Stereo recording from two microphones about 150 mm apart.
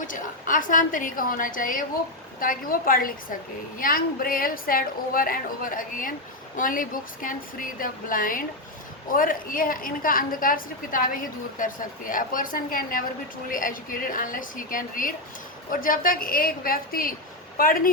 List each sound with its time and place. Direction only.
0.1 s a woman's voice: 60° left (ahead or behind)